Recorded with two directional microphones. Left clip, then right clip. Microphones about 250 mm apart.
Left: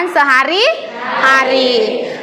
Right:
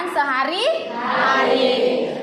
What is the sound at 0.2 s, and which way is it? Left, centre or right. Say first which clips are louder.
Speech: left 9 dB; left.